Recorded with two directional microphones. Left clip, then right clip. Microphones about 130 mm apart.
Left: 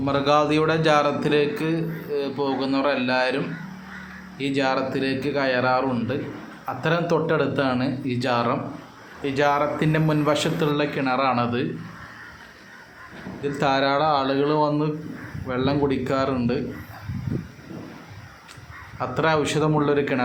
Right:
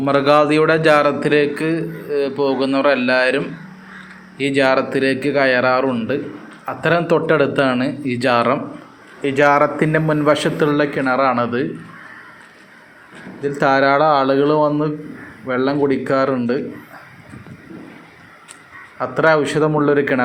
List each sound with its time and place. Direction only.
0.0 s a man's voice: 25° right (ahead or behind)
9.8 s a man's voice: 20° right (ahead or behind)
13.4 s a man's voice: 25° right (ahead or behind)
18.9 s a man's voice: 20° right (ahead or behind)